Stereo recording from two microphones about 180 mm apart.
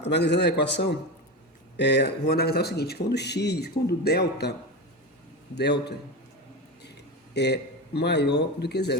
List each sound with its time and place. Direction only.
0.0 s speech: 70° left (ahead or behind)
5.5 s speech: 70° left (ahead or behind)
7.3 s speech: 70° left (ahead or behind)